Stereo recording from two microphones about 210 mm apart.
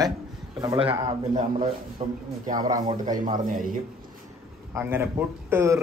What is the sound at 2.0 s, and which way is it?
Speech, 30° right (ahead or behind).